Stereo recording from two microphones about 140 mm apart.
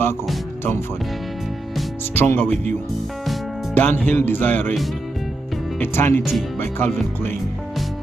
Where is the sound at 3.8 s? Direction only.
10° left (ahead or behind).